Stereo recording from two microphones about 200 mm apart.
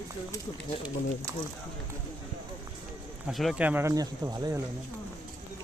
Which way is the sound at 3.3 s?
Centre (ahead or behind).